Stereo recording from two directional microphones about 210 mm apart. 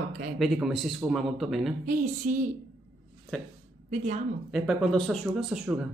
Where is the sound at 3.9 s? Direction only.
35° right (ahead or behind).